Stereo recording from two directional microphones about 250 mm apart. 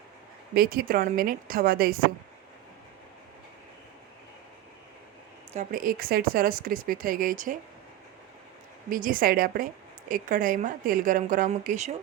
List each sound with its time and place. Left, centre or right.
0.5 s speech: right
5.5 s speech: right
8.9 s speech: right